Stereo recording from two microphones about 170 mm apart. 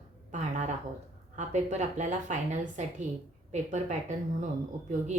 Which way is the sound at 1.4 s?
45° right (ahead or behind).